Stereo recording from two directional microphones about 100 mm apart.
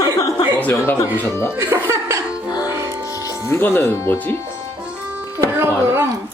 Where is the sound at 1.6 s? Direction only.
25° right (ahead or behind).